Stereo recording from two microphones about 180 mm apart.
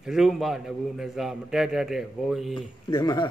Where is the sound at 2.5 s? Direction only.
25° left (ahead or behind).